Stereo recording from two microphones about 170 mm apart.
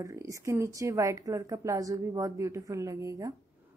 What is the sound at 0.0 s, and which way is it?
A woman's voice, 20° right (ahead or behind).